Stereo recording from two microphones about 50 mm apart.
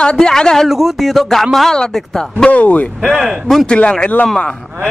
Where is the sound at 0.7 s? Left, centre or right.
Centre.